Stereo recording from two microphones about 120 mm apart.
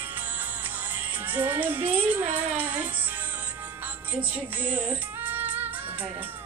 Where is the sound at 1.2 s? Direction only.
15° right (ahead or behind).